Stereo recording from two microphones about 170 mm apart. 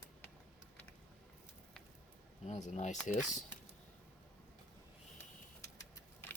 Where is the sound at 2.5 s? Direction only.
45° left (ahead or behind).